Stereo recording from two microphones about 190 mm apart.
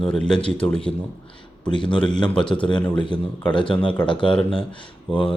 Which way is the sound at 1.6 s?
25° left (ahead or behind).